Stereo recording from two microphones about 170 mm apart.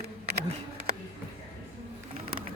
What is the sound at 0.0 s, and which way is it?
Bee, 65° right (ahead or behind).